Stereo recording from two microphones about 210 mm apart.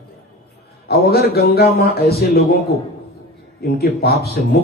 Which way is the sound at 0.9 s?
50° left (ahead or behind).